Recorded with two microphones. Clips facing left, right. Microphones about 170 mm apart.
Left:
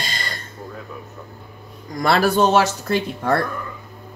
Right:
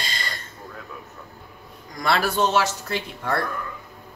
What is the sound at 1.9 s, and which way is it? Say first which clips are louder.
Speech: left 5 dB; 40° left (ahead or behind).